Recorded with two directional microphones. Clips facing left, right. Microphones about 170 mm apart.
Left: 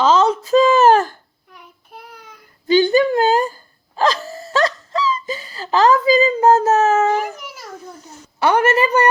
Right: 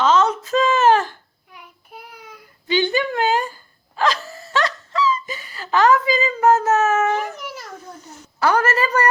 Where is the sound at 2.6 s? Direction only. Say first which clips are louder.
Left 7 dB; 40° left (ahead or behind).